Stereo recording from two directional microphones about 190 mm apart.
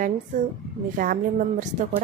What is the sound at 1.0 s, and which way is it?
Speech, 45° right (ahead or behind).